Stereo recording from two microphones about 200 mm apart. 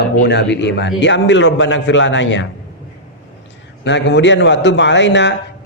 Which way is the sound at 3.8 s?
60° left (ahead or behind).